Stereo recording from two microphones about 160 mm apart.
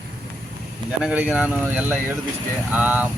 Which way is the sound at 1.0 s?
10° right (ahead or behind).